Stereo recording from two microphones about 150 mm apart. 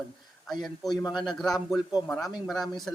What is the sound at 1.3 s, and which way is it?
Speech, centre (ahead or behind).